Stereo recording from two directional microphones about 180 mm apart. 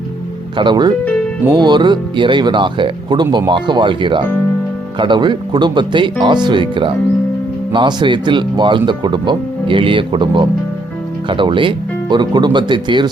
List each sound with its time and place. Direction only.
0.5 s speech: 25° right (ahead or behind)